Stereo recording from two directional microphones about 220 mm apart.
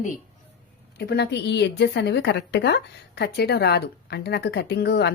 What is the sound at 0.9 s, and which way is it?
A woman's voice, 50° left (ahead or behind).